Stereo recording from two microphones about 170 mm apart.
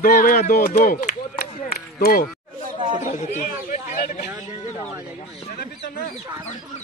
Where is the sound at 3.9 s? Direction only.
55° left (ahead or behind).